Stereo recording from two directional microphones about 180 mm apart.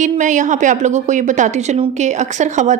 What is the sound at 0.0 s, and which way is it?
A woman's voice, 45° right (ahead or behind).